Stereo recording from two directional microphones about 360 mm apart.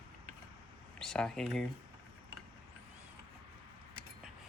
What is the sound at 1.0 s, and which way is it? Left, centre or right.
Speech, centre.